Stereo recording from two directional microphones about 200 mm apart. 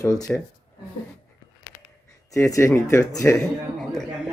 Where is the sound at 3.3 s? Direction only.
Centre (ahead or behind).